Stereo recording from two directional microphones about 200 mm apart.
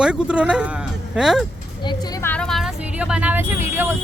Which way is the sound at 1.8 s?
20° left (ahead or behind).